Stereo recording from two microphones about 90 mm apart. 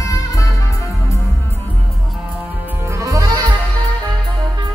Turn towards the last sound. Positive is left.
turn(degrees=-40)  # may be behind; listen again after turning